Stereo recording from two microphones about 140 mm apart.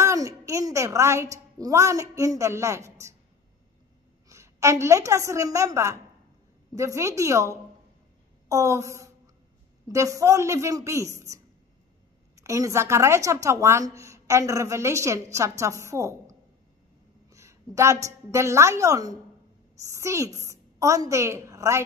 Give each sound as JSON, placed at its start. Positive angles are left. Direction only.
{"t": 0.0, "sound": "a woman's voice", "side_deg": -20}
{"t": 4.3, "sound": "a woman's voice", "side_deg": -20}